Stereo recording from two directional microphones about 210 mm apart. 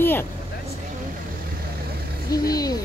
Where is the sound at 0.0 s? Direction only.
10° left (ahead or behind).